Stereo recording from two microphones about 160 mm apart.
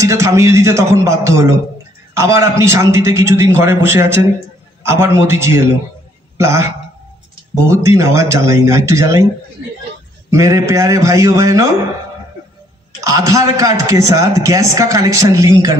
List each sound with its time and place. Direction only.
0.0 s a man's voice: 20° right (ahead or behind)
10.3 s a man's voice: 20° right (ahead or behind)
13.0 s a man's voice: 20° right (ahead or behind)